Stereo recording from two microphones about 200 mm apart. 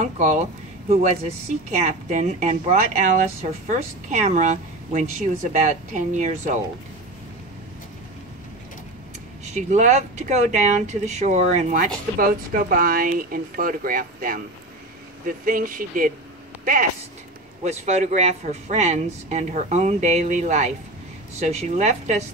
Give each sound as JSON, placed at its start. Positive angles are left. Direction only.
{"t": 0.0, "sound": "speech", "side_deg": -35}
{"t": 9.4, "sound": "speech", "side_deg": -35}
{"t": 12.2, "sound": "speech", "side_deg": -45}
{"t": 17.6, "sound": "speech", "side_deg": -35}